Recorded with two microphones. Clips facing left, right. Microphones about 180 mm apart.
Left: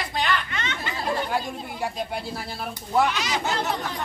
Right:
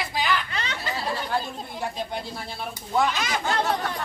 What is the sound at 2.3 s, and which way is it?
Speech, 5° left (ahead or behind).